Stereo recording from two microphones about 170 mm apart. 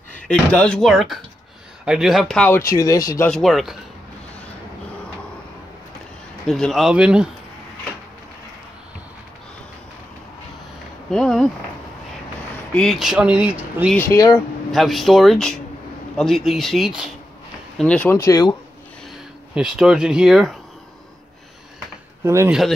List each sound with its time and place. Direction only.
0.3 s speech: 5° left (ahead or behind)
2.7 s speech: 20° left (ahead or behind)
3.3 s speech: centre (ahead or behind)
6.4 s speech: centre (ahead or behind)
11.1 s speech: centre (ahead or behind)
12.7 s speech: centre (ahead or behind)
13.9 s speech: 20° left (ahead or behind)
14.7 s speech: centre (ahead or behind); by 18.6 s 20° left (ahead or behind)
19.5 s speech: 5° right (ahead or behind)
22.2 s speech: 15° right (ahead or behind)